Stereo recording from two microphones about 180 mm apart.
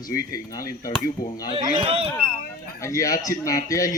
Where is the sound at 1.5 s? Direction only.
30° right (ahead or behind).